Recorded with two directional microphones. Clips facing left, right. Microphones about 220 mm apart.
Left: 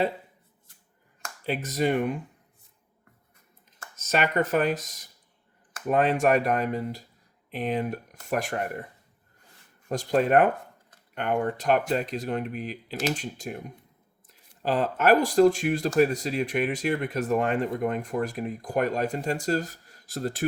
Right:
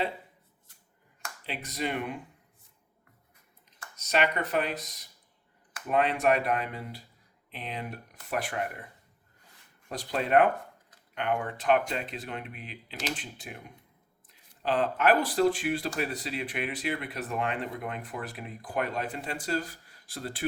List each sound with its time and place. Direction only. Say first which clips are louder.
1.5 s speech: left 8 dB; 45° left (ahead or behind)
3.8 s speech: left 1 dB; 45° left (ahead or behind)
9.9 s speech: left 4 dB; 45° left (ahead or behind)